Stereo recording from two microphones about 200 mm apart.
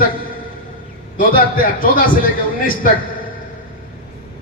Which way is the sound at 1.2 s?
45° left (ahead or behind).